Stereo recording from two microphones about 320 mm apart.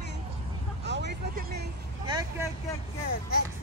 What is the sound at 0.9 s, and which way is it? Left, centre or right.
Speech, right.